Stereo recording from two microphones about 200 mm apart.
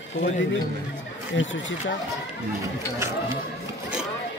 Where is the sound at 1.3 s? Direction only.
70° left (ahead or behind).